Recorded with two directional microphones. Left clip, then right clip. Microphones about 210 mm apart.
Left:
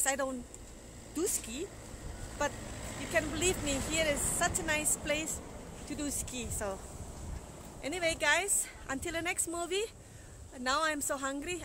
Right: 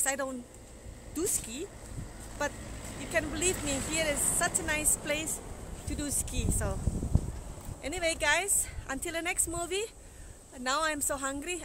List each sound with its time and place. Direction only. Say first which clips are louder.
0.0 s speech: even; 5° left (ahead or behind)
2.5 s vehicle: left 1 dB; 35° left (ahead or behind)
3.1 s speech: right 1 dB; centre (ahead or behind)
7.8 s speech: right 1 dB; centre (ahead or behind)